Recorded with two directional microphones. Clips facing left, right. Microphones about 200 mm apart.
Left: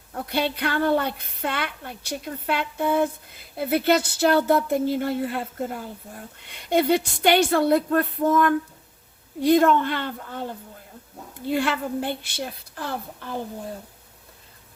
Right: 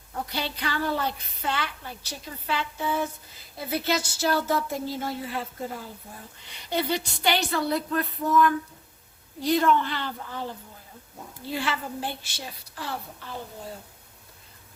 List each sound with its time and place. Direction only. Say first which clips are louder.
0.3 s a woman's voice: left 9 dB; 60° left (ahead or behind)
11.4 s a woman's voice: left 6 dB; 55° left (ahead or behind)